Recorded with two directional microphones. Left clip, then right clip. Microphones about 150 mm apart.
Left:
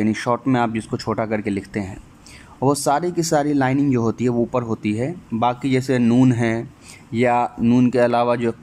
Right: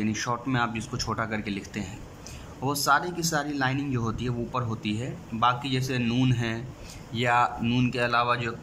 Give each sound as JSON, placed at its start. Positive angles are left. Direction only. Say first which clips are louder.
{"t": 0.0, "sound": "speech", "louder": "left 9 dB", "side_deg": 40}